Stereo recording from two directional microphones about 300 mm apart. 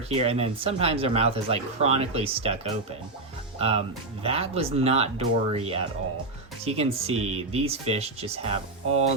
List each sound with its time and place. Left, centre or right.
0.1 s speech: centre
3.6 s speech: centre